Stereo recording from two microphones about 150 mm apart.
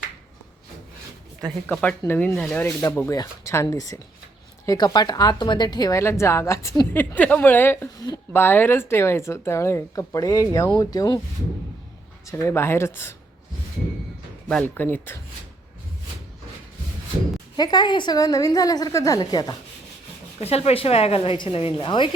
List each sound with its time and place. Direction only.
1.6 s speech: 10° left (ahead or behind); by 11.2 s 25° left (ahead or behind)
12.3 s speech: 20° left (ahead or behind)
14.4 s speech: 10° left (ahead or behind)
17.6 s speech: 30° left (ahead or behind)
20.4 s a woman's voice: 45° left (ahead or behind)